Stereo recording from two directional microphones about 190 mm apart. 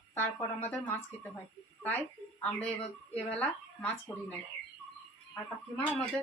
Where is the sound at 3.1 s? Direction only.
5° left (ahead or behind).